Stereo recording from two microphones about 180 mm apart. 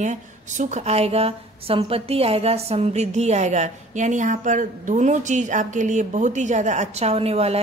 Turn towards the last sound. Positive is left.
turn(degrees=-35)  # may be behind; listen again after turning